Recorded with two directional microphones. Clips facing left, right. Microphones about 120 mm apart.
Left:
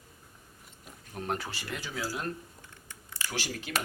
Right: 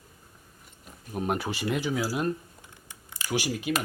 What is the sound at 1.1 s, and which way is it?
Speech, 15° right (ahead or behind).